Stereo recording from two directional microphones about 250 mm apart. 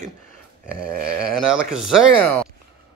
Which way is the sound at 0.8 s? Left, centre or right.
Right.